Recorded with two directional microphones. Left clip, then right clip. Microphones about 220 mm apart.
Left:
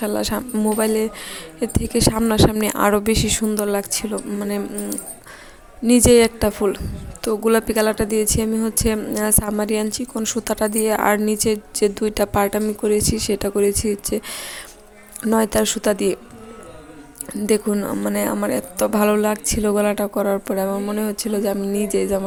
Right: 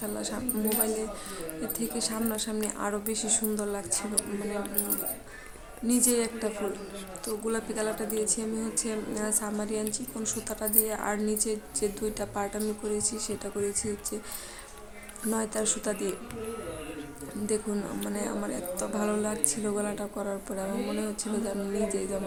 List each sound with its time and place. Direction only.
0.0 s a woman's voice: 40° left (ahead or behind)
5.9 s a woman's voice: 35° left (ahead or behind)
15.2 s a woman's voice: 35° left (ahead or behind)
17.4 s a woman's voice: 35° left (ahead or behind)